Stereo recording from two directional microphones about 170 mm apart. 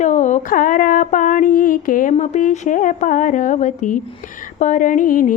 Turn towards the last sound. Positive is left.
turn(degrees=50)  # may be behind; listen again after turning